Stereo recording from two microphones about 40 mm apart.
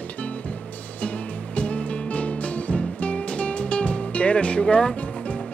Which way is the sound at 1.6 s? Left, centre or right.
Left.